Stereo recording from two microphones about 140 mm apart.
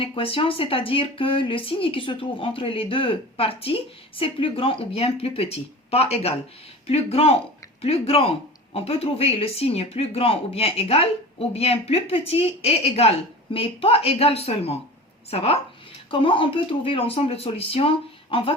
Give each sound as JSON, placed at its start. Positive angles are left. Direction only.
{"t": 0.0, "sound": "speech", "side_deg": 40}